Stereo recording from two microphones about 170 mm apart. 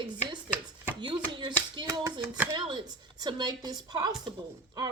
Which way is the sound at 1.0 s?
25° right (ahead or behind).